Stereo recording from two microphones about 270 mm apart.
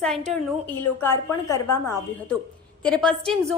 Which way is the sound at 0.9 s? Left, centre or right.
Centre.